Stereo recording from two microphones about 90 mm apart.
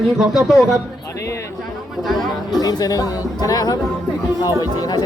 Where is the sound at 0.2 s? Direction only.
5° right (ahead or behind).